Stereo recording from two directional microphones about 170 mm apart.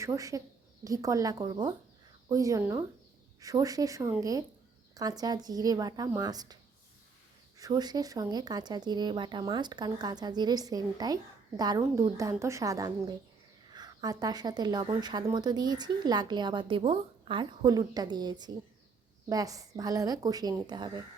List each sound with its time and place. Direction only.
0.0 s speech: 20° right (ahead or behind)
7.6 s speech: 25° right (ahead or behind)